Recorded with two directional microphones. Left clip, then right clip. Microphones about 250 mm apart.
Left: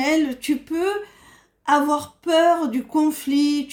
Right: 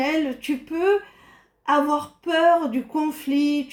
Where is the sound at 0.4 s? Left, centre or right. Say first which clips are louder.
Right 1 dB; left.